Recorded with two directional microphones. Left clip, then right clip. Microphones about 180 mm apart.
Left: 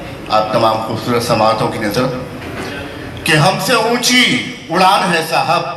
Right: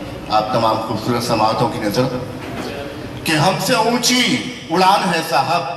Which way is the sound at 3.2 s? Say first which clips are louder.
Left 4 dB; 45° left (ahead or behind).